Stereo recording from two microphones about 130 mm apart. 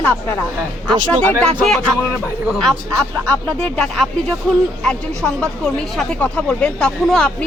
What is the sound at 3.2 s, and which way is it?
A woman's voice, 5° left (ahead or behind).